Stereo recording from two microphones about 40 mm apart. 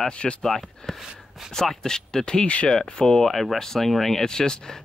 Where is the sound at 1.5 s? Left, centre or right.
Centre.